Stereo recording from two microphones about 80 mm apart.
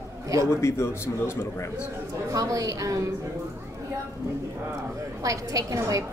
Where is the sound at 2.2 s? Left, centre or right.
Right.